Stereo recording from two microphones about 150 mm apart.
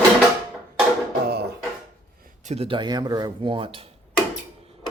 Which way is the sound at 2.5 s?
40° right (ahead or behind).